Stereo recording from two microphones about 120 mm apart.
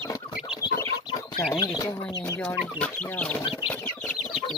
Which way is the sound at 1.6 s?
30° left (ahead or behind).